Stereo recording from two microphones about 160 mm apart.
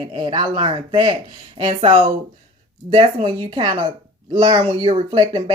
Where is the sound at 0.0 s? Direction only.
30° right (ahead or behind).